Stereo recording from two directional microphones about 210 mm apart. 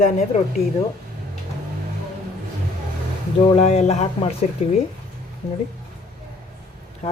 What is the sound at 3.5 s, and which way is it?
Speech, 30° left (ahead or behind).